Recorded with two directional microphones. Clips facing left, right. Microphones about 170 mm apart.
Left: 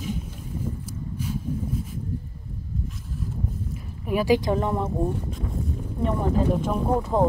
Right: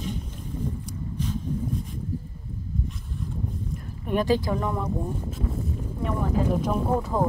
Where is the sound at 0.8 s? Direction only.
10° left (ahead or behind).